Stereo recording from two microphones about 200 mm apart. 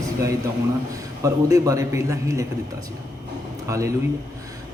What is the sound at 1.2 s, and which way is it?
A man's voice, 15° right (ahead or behind).